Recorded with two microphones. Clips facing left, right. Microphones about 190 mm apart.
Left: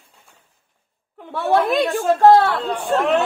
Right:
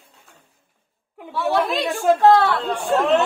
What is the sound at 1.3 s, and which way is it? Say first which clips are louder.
Speech: left 3 dB; 55° left (ahead or behind).